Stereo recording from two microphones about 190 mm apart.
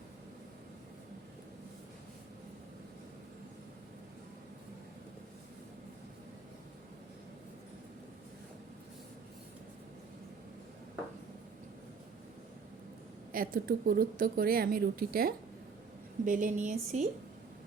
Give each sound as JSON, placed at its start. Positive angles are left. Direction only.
{"t": 13.3, "sound": "a woman's voice", "side_deg": -50}